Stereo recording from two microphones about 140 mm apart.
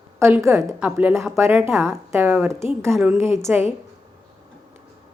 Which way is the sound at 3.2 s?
20° right (ahead or behind).